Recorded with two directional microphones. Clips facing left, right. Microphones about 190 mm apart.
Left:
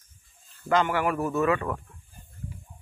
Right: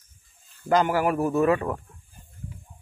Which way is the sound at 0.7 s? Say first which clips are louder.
Right 3 dB; 40° right (ahead or behind).